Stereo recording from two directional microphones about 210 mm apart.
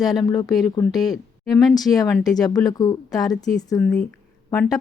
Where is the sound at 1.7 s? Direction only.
20° left (ahead or behind).